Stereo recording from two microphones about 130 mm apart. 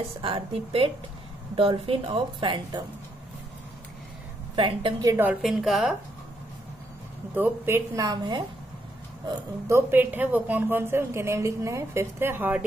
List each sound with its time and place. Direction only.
0.2 s a woman's voice: 45° right (ahead or behind)
4.6 s speech: 40° right (ahead or behind)
5.0 s a woman's voice: 15° right (ahead or behind)
5.4 s a woman's voice: centre (ahead or behind)
7.3 s a woman's voice: 15° right (ahead or behind)
9.7 s a woman's voice: 15° right (ahead or behind)